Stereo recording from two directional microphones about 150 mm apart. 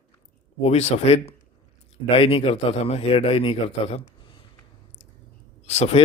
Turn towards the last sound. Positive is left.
turn(degrees=45)  # may be behind; listen again after turning